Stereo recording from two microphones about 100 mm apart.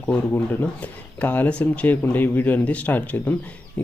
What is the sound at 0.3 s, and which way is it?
Speech, 15° left (ahead or behind).